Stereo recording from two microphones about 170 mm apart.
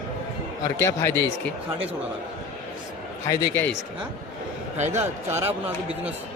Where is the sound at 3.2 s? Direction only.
20° left (ahead or behind).